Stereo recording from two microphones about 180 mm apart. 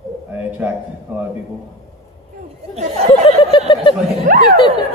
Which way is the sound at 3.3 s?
30° left (ahead or behind).